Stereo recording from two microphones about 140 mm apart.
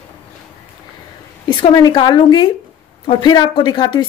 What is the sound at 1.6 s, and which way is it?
A woman's voice, 30° left (ahead or behind).